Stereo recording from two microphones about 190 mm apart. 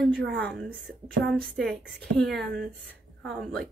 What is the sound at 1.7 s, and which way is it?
A woman's voice, centre (ahead or behind).